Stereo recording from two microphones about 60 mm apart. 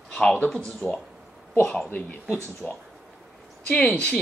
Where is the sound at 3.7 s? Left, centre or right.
Centre.